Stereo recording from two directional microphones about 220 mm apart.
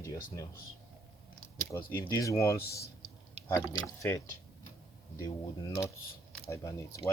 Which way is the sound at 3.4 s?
30° right (ahead or behind).